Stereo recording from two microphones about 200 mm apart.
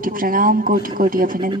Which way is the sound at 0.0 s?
45° right (ahead or behind).